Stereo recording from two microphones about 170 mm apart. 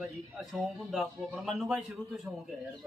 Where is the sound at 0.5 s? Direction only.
Centre (ahead or behind).